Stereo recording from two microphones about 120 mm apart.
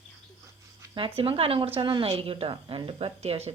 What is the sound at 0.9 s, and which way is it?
A woman's voice, 45° right (ahead or behind).